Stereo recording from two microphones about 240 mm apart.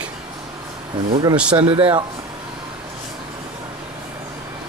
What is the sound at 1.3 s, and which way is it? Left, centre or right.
Speech, centre.